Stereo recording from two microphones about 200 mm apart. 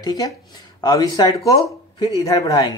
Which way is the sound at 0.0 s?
20° left (ahead or behind).